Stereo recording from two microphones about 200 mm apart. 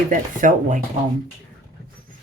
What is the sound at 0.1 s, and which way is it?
Speech, 40° right (ahead or behind).